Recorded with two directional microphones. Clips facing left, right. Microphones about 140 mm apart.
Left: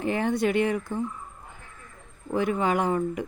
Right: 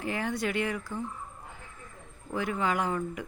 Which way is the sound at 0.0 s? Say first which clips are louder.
Left 7 dB; 25° left (ahead or behind).